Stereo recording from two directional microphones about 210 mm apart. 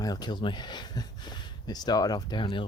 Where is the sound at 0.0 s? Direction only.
20° left (ahead or behind).